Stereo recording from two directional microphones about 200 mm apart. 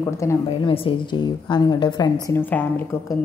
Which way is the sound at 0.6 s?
25° left (ahead or behind).